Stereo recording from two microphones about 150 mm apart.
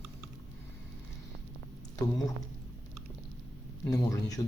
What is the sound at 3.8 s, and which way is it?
Speech, 20° left (ahead or behind).